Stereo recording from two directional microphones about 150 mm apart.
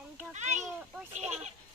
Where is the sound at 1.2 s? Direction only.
45° right (ahead or behind).